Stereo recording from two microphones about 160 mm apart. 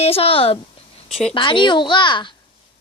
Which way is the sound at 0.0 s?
35° left (ahead or behind).